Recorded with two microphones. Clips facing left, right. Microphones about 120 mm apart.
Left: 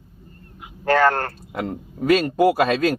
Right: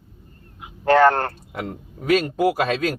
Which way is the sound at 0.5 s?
20° right (ahead or behind).